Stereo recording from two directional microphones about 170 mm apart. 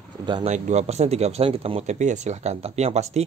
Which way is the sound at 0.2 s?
25° right (ahead or behind).